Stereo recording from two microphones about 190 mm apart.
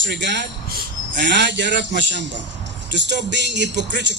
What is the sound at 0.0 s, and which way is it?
Speech, 65° right (ahead or behind).